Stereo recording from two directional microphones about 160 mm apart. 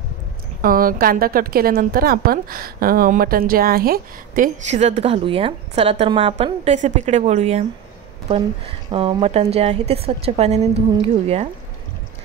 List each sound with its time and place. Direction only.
0.6 s a woman's voice: 60° right (ahead or behind)
4.6 s a woman's voice: 45° right (ahead or behind)